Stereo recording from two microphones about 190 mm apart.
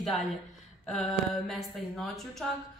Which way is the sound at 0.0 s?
Centre (ahead or behind).